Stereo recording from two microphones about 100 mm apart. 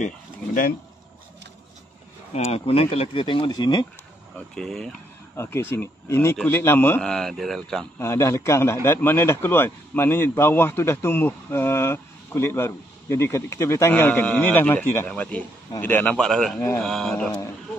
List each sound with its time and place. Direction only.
2.3 s speech: 80° left; by 3.8 s 45° left (ahead or behind)
4.6 s speech: 5° left (ahead or behind)
5.3 s a man's voice: 25° left (ahead or behind)
7.0 s speech: 5° left (ahead or behind)
8.0 s a man's voice: 25° left (ahead or behind)
16.3 s speech: 5° left (ahead or behind)
16.5 s a man's voice: 20° left (ahead or behind)
16.8 s speech: 5° left (ahead or behind)